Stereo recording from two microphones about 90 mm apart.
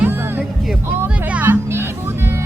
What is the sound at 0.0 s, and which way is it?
Music, 20° right (ahead or behind).